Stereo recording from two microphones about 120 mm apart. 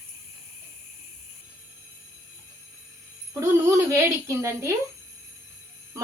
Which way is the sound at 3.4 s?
25° right (ahead or behind).